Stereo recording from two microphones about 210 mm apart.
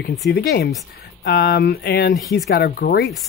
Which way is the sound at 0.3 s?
50° left (ahead or behind).